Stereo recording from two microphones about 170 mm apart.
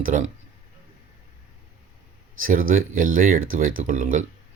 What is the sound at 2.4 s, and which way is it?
Speech, 55° right (ahead or behind).